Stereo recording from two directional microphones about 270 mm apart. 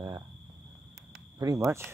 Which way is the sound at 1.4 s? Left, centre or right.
Centre.